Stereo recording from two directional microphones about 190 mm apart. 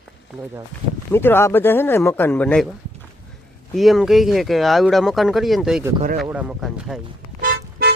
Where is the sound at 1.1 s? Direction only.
10° left (ahead or behind).